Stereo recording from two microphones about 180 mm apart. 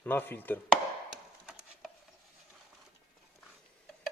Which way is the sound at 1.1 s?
5° right (ahead or behind).